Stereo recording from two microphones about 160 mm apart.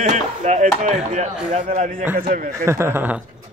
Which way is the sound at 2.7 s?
15° right (ahead or behind).